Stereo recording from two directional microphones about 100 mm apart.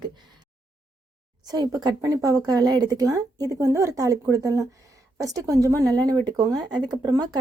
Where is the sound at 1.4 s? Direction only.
40° right (ahead or behind).